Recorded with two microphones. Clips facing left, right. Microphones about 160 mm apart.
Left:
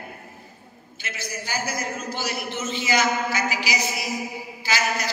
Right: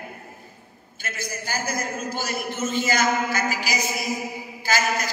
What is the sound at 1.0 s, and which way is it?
A man's voice, 50° right (ahead or behind).